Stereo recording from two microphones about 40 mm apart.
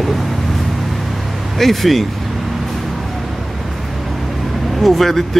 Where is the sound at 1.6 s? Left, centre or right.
Centre.